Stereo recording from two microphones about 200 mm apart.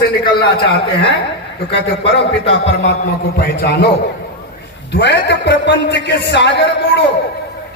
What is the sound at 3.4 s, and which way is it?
Speech, 55° left (ahead or behind).